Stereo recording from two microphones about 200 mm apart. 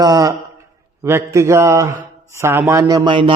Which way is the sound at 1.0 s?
15° right (ahead or behind).